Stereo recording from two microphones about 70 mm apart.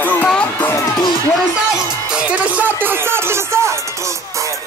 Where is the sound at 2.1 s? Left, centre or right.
Centre; by 3.7 s right.